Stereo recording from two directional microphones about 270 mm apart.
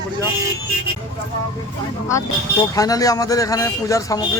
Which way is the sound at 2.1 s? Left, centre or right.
Centre.